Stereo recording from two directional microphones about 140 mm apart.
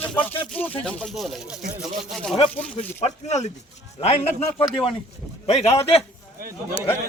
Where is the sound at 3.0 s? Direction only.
50° left (ahead or behind).